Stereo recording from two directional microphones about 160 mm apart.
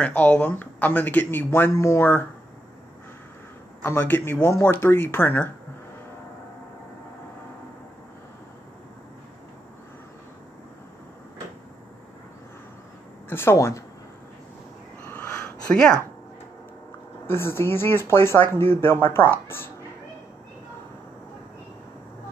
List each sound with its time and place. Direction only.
0.0 s speech: 10° left (ahead or behind)
3.8 s speech: 15° left (ahead or behind)
13.3 s speech: 15° left (ahead or behind)
15.0 s a sound: 10° left (ahead or behind)
17.3 s speech: 15° left (ahead or behind)